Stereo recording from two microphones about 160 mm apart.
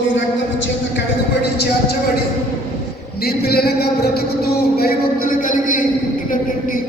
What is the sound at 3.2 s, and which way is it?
A man's voice, 75° left (ahead or behind).